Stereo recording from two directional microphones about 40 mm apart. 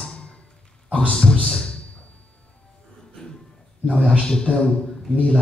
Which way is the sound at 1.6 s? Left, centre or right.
Left.